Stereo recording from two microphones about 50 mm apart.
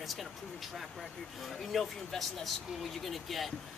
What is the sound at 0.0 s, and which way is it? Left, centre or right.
Speech, centre.